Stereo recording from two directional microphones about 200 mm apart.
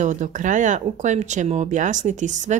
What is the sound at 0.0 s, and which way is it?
Speech, 40° right (ahead or behind).